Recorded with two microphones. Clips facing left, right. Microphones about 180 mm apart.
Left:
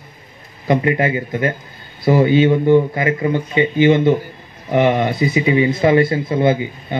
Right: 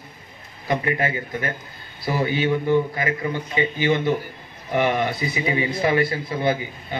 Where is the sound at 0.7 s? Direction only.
20° left (ahead or behind).